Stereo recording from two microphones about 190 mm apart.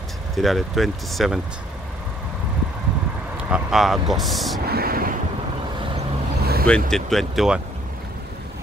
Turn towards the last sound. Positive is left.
turn(degrees=0)  # may be behind; listen again after turning